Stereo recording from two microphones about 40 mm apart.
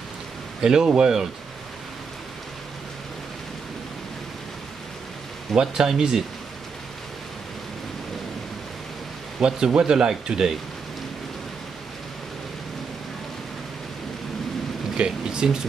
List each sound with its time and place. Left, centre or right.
0.6 s speech: centre
5.5 s speech: centre
9.4 s speech: centre
15.0 s speech: centre